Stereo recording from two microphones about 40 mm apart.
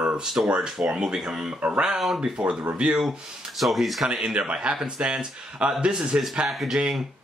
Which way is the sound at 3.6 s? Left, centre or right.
Centre.